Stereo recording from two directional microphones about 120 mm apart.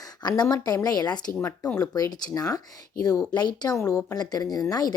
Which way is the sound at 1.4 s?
15° left (ahead or behind).